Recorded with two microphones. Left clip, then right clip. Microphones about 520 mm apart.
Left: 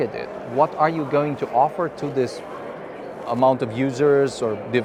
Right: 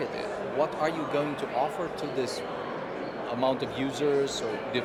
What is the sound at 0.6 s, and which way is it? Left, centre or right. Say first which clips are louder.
Speech: left 10 dB; left.